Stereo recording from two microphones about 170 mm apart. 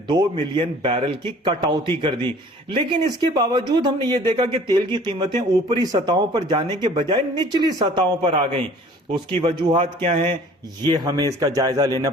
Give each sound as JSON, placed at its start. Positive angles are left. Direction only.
{"t": 0.1, "sound": "speech", "side_deg": -25}